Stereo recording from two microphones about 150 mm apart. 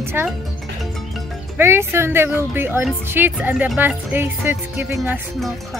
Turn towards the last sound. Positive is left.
turn(degrees=-15)  # may be behind; listen again after turning